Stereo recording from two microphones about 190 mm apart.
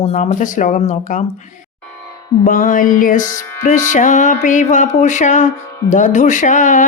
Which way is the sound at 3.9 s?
40° left (ahead or behind).